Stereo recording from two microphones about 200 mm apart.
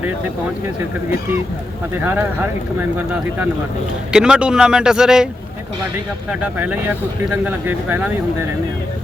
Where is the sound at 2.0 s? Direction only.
10° right (ahead or behind).